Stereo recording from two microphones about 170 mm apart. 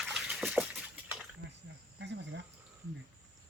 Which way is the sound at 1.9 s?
90° right.